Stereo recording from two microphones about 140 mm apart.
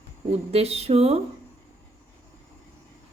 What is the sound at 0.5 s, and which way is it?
Speech, 45° right (ahead or behind).